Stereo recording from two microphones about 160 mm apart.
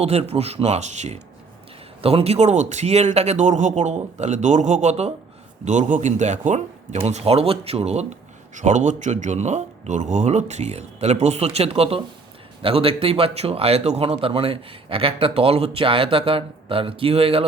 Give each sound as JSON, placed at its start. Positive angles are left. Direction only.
{"t": 0.0, "sound": "speech", "side_deg": -40}